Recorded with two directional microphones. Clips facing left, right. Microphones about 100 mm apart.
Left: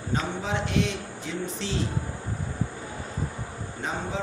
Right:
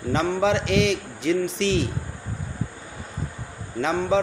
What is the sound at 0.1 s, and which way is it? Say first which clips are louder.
A man's voice: right 8 dB; 75° right (ahead or behind).